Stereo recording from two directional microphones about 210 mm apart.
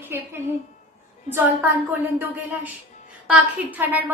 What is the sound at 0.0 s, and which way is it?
A woman's voice, 10° right (ahead or behind).